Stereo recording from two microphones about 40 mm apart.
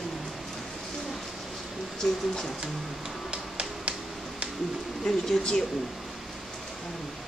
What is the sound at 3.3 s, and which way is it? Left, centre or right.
Tap, right.